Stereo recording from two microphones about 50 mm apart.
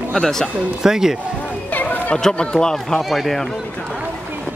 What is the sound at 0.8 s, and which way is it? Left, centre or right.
Speech, centre.